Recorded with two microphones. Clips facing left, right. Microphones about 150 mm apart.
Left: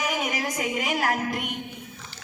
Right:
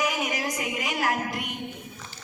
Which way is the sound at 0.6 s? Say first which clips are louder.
Left 2 dB; 50° left (ahead or behind).